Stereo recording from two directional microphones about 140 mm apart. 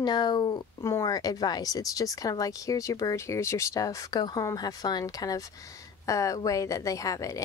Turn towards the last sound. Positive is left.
turn(degrees=25)  # may be behind; listen again after turning